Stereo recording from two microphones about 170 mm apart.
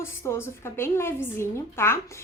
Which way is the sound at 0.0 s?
15° left (ahead or behind).